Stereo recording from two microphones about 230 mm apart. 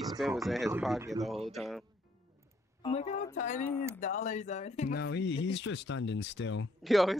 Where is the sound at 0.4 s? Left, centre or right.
Centre.